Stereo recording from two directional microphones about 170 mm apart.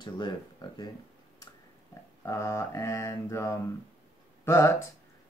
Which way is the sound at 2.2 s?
15° left (ahead or behind).